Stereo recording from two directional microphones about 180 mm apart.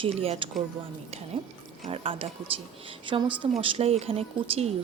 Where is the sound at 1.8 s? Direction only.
30° right (ahead or behind).